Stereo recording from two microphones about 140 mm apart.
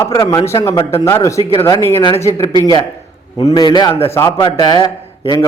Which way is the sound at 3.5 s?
30° left (ahead or behind).